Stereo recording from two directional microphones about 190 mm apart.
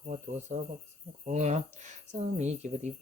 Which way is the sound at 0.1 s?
35° right (ahead or behind).